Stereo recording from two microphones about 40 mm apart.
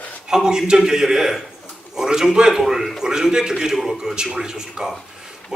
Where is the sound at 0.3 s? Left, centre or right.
Centre.